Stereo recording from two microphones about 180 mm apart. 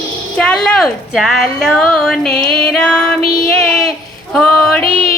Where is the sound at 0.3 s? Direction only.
5° left (ahead or behind).